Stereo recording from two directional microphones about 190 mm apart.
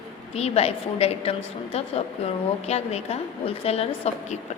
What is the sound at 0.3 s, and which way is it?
A woman's voice, 35° left (ahead or behind).